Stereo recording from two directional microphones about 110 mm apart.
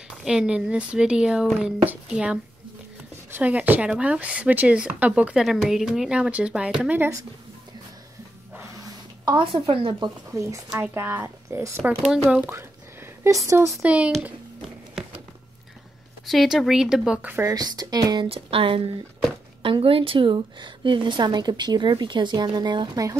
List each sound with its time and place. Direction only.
0.1 s speech: 5° right (ahead or behind)
8.5 s a sound: 30° right (ahead or behind)
9.4 s speech: 55° right (ahead or behind)
10.3 s speech: 30° right (ahead or behind)
10.7 s speech: 20° right (ahead or behind)
12.1 s speech: 10° right (ahead or behind)
12.4 s a sound: 25° right (ahead or behind)
13.8 s speech: 10° right (ahead or behind)
16.3 s speech: centre (ahead or behind); by 17.5 s 15° right (ahead or behind)
17.5 s speech: 35° right (ahead or behind)
18.3 s speech: 55° right (ahead or behind)